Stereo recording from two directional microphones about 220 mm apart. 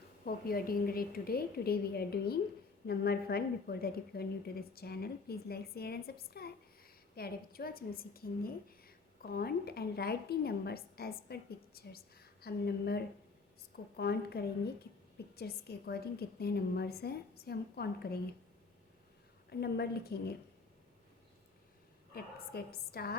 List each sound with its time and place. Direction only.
0.3 s a woman's voice: 40° left (ahead or behind)
19.5 s a woman's voice: 45° left (ahead or behind)
22.1 s a woman's voice: 45° left (ahead or behind)